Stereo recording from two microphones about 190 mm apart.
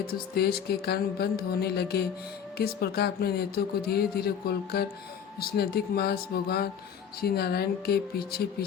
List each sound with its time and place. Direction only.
0.1 s speech: 55° left (ahead or behind)